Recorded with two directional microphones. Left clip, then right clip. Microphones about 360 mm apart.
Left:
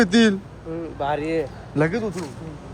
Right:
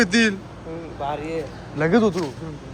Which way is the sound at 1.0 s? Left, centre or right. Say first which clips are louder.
Left 3 dB; left.